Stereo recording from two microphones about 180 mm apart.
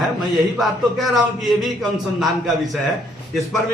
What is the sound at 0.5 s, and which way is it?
A man's voice, centre (ahead or behind).